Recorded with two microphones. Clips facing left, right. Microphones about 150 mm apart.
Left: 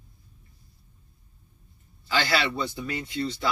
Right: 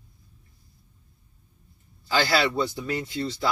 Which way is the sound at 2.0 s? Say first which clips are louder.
Right 3 dB; 35° right (ahead or behind).